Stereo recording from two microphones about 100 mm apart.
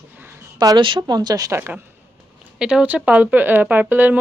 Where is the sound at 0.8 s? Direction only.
50° right (ahead or behind).